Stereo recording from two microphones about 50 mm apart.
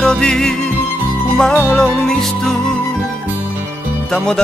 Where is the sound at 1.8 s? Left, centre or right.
Centre.